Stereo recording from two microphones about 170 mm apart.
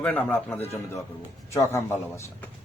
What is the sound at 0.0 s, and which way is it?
A man's voice, 10° left (ahead or behind).